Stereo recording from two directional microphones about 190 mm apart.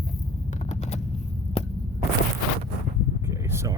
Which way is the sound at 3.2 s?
15° right (ahead or behind).